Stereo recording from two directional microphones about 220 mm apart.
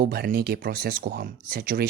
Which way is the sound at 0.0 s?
45° right (ahead or behind).